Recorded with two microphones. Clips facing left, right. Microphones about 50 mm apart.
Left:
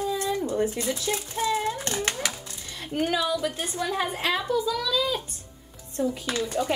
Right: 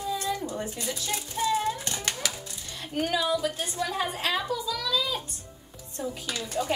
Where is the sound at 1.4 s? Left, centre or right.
Centre.